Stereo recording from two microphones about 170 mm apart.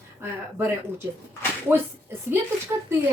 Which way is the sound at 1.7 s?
10° right (ahead or behind).